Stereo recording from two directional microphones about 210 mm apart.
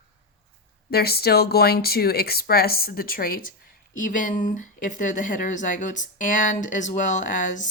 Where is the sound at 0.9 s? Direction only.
45° left (ahead or behind).